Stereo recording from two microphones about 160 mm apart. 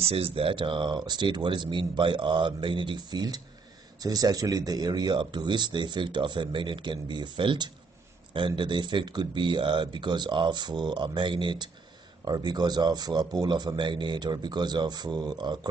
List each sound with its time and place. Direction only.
0.0 s speech: 40° right (ahead or behind)